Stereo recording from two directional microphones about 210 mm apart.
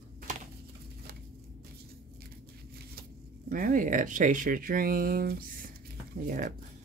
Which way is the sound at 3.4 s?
40° right (ahead or behind).